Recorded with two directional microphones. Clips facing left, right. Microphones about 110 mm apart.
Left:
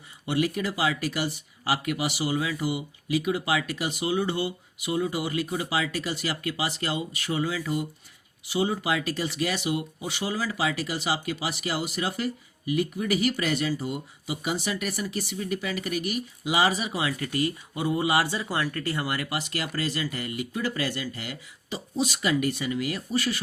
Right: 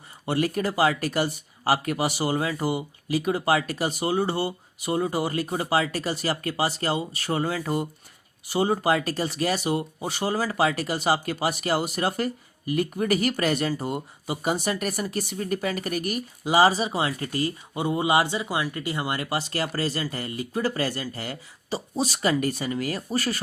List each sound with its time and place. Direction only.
0.3 s speech: 40° right (ahead or behind)